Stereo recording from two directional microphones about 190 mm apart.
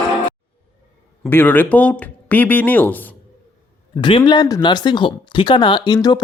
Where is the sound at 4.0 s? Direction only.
25° left (ahead or behind).